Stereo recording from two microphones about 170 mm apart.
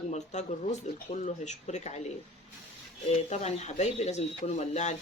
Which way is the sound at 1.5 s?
45° left (ahead or behind).